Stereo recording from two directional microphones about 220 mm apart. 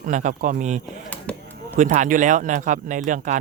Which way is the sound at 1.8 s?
35° right (ahead or behind).